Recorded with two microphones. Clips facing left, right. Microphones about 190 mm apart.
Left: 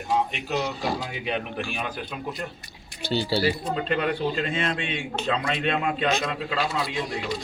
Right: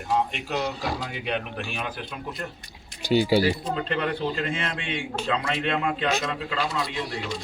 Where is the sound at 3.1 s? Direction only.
15° right (ahead or behind).